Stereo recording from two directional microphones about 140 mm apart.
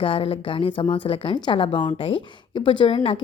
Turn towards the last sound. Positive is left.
turn(degrees=40)  # may be behind; listen again after turning